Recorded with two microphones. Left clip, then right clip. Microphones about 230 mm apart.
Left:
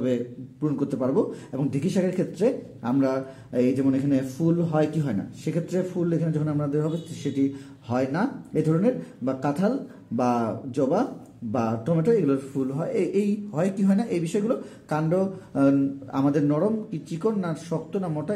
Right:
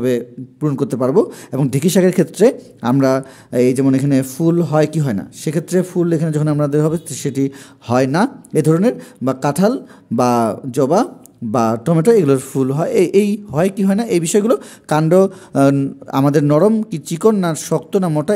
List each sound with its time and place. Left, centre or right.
0.0 s a man's voice: right